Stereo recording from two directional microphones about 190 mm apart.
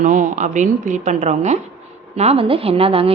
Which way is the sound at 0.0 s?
40° right (ahead or behind).